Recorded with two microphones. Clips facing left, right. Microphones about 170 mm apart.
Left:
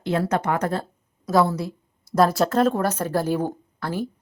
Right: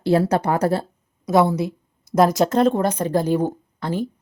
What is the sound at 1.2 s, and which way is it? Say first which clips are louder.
A woman's voice: right 3 dB; 20° right (ahead or behind).